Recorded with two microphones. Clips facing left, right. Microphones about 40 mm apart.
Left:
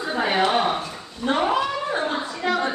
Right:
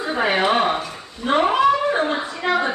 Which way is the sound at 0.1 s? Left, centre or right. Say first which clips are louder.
Right 2 dB; centre.